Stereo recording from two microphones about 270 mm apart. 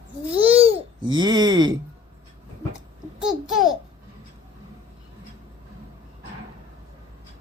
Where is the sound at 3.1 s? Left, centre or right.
Centre.